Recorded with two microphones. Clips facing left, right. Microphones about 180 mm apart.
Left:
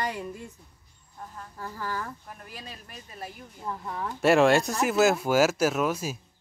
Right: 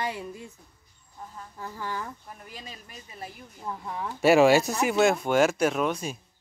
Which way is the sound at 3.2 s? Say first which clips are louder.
Left 1 dB; 5° right (ahead or behind).